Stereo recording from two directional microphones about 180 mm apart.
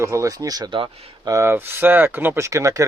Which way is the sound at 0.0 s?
15° right (ahead or behind).